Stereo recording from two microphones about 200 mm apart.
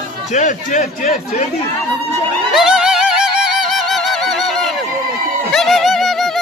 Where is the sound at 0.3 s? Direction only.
35° left (ahead or behind).